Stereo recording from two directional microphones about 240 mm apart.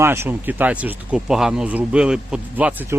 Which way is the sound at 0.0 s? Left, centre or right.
Centre.